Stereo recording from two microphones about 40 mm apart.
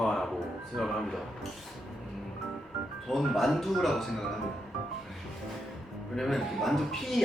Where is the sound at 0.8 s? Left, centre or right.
Left.